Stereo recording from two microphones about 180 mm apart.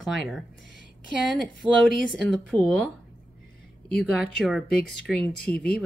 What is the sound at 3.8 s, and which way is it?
A woman's voice, centre (ahead or behind).